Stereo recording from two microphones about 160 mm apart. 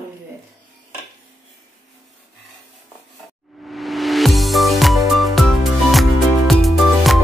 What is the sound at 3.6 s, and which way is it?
Music, centre (ahead or behind).